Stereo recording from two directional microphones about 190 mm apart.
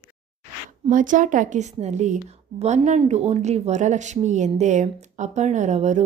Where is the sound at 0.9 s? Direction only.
45° right (ahead or behind).